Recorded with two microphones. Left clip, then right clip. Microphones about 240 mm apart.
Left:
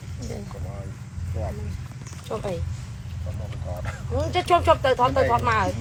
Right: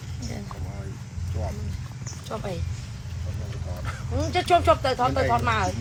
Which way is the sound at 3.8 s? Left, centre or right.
Left.